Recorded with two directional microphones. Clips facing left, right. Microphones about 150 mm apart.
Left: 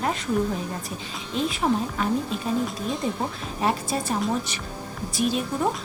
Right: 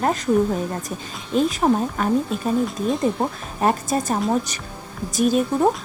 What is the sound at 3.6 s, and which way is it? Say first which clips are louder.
A woman's voice: right 5 dB; 45° right (ahead or behind).